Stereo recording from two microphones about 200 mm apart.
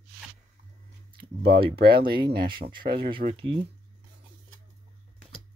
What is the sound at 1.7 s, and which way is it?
Speech, 50° right (ahead or behind).